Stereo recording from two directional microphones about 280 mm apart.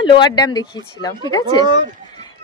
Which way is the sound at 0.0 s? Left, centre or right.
Centre.